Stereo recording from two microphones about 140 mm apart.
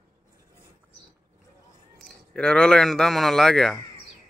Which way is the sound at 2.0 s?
5° left (ahead or behind).